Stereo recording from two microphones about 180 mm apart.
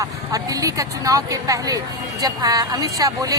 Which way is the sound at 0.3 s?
20° right (ahead or behind).